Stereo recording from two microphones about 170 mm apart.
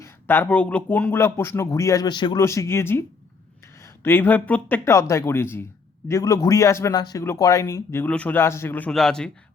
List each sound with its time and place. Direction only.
0.0 s speech: 10° left (ahead or behind)